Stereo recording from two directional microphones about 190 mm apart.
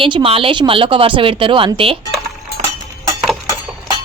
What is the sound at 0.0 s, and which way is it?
Speech, 30° right (ahead or behind).